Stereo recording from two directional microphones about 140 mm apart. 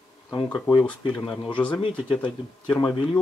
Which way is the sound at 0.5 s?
30° left (ahead or behind).